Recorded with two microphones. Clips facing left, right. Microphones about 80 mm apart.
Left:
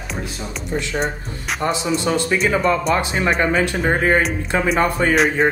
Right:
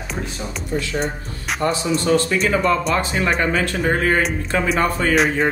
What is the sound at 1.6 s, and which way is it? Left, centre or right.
A man's voice, centre.